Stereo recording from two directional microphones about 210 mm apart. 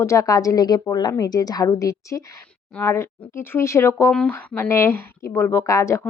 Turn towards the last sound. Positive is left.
turn(degrees=15)  # may be behind; listen again after turning